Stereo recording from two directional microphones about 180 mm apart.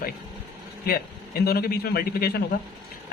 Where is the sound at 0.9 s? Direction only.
55° left (ahead or behind).